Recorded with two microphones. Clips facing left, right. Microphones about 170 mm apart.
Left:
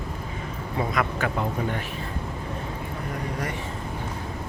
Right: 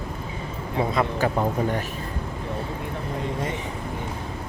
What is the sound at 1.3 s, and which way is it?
Speech, 40° right (ahead or behind).